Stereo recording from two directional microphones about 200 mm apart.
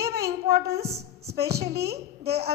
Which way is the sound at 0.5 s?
50° right (ahead or behind).